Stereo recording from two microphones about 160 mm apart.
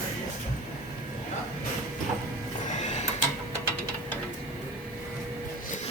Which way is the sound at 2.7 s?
45° left (ahead or behind).